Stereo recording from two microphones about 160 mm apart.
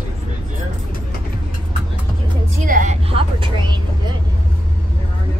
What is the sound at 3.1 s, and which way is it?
Speech, 30° right (ahead or behind).